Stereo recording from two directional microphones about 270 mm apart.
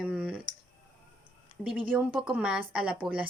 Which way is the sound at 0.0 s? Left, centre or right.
Centre.